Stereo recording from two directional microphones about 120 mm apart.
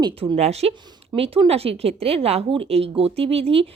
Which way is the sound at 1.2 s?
55° right (ahead or behind).